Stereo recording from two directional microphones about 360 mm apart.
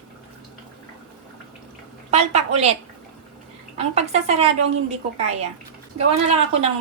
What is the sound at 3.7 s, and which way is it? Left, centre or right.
Speech, centre.